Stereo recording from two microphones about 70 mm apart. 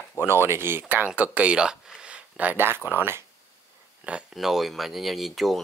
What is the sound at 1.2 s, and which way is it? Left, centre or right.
Speech, centre.